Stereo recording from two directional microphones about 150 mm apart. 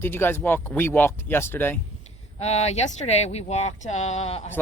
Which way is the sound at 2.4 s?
45° left (ahead or behind).